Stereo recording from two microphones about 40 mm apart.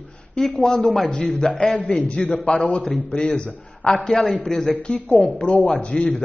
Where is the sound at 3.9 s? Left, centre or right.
Centre.